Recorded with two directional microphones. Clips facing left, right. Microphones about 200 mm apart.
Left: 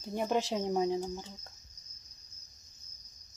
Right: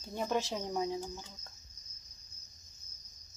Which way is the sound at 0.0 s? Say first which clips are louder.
Left 3 dB; 15° left (ahead or behind).